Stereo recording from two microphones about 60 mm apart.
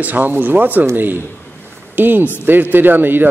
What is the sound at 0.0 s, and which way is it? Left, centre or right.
A man's voice, right.